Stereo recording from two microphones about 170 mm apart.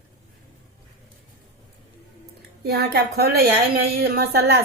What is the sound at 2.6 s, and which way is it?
A woman's voice, 70° right (ahead or behind).